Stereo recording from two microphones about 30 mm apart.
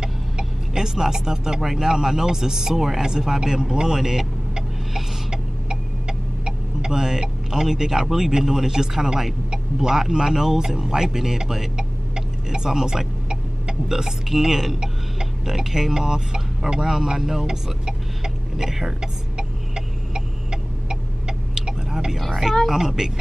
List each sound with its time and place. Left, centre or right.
0.0 s speech: right
5.3 s speech: right
17.1 s a sound: centre
22.7 s speech: centre